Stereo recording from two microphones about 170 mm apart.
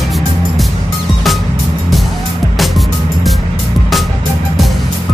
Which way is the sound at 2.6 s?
Centre (ahead or behind).